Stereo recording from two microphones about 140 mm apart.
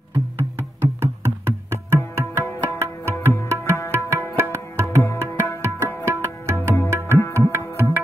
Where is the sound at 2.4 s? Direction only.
20° left (ahead or behind).